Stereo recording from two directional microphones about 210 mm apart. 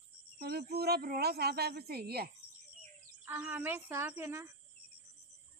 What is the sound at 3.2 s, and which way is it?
Speech, 10° right (ahead or behind).